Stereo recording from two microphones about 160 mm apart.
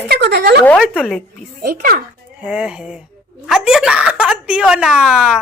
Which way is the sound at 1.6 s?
65° right (ahead or behind).